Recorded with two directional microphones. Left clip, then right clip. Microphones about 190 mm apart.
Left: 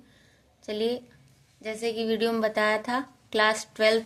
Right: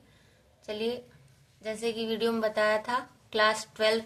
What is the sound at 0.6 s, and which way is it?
A woman's voice, 35° left (ahead or behind).